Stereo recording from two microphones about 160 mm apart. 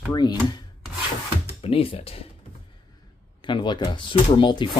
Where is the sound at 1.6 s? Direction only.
35° left (ahead or behind).